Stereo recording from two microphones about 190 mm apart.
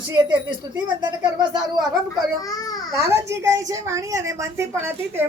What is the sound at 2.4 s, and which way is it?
Speech, 20° left (ahead or behind).